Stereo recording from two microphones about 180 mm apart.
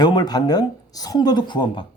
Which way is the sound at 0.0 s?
20° left (ahead or behind).